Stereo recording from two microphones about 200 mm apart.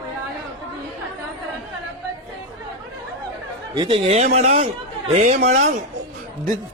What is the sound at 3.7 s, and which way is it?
A man's voice, 25° right (ahead or behind).